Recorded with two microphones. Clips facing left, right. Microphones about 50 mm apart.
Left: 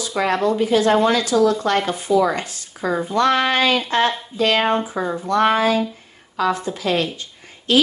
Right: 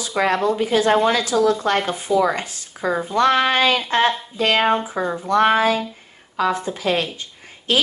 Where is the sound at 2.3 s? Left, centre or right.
Right.